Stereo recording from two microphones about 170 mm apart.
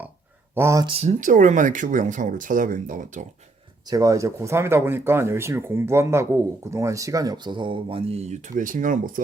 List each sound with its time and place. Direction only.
0.5 s speech: 15° right (ahead or behind)
0.9 s speech: 35° right (ahead or behind)
1.2 s speech: 50° right (ahead or behind)
3.8 s speech: 20° right (ahead or behind); by 9.2 s 50° right (ahead or behind)